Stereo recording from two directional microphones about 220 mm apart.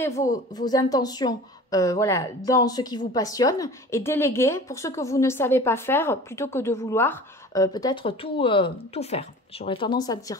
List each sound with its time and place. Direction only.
0.3 s a woman's voice: 15° left (ahead or behind)